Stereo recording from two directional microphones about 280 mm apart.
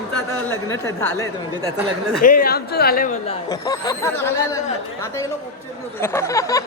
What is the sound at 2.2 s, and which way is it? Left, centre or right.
Speech, left.